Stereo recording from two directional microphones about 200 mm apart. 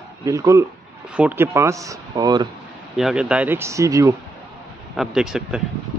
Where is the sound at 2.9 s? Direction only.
5° right (ahead or behind).